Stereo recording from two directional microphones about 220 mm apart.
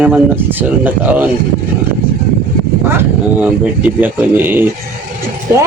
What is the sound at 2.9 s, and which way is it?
Speech, 10° right (ahead or behind).